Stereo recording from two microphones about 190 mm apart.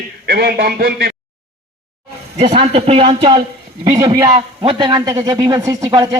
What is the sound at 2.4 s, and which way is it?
A man's voice, 30° right (ahead or behind).